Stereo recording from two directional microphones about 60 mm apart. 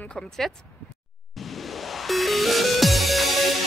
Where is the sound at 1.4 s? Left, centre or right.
Centre.